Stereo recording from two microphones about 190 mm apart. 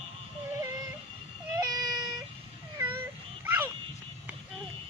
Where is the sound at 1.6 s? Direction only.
20° right (ahead or behind).